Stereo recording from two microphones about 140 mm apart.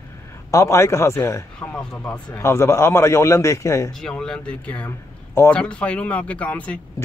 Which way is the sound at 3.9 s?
5° left (ahead or behind).